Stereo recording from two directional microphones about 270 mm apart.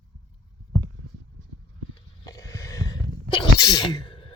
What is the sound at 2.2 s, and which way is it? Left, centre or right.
Sneeze, centre.